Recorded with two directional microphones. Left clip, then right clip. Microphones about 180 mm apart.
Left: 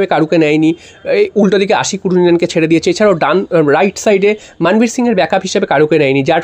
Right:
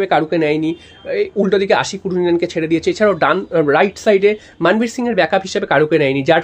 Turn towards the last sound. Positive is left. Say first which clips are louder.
# left 3 dB
turn(degrees=30)  # may be behind; listen again after turning